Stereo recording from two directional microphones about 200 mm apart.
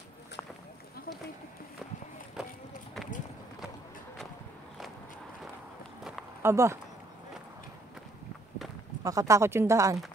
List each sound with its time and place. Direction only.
2.4 s run: 5° right (ahead or behind)
6.4 s speech: 15° right (ahead or behind)
8.6 s clip-clop: centre (ahead or behind)
9.0 s speech: 15° right (ahead or behind)